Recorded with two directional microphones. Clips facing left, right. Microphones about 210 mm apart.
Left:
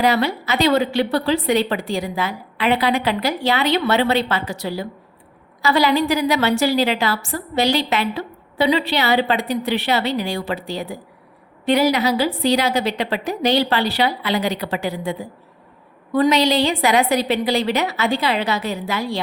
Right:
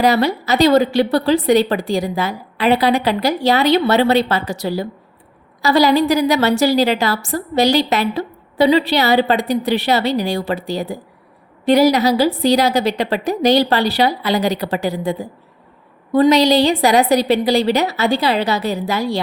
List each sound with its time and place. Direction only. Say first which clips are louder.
0.0 s a woman's voice: right 3 dB; 40° right (ahead or behind)